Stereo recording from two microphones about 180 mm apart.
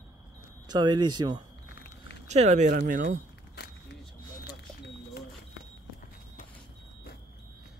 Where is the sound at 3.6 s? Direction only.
65° left (ahead or behind).